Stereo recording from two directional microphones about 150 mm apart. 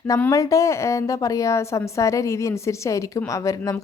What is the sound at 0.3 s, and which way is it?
A woman's voice, 20° left (ahead or behind).